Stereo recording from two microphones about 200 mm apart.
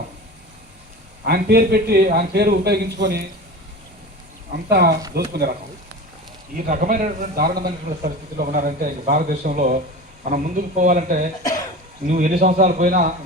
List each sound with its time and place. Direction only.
1.2 s speech: 50° right (ahead or behind)
4.5 s speech: 50° right (ahead or behind)
6.7 s a man's voice: 40° right (ahead or behind)